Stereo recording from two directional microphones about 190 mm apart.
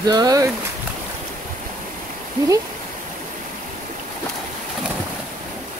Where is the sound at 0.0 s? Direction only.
20° right (ahead or behind).